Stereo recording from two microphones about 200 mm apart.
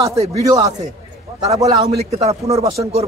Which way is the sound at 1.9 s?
30° right (ahead or behind).